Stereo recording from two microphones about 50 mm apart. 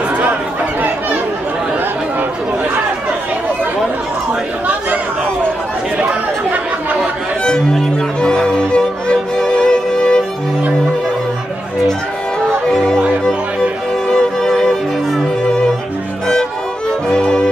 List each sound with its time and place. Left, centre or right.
5.9 s chatter: right
8.2 s music: centre
12.6 s music: centre
14.1 s music: centre
17.1 s music: centre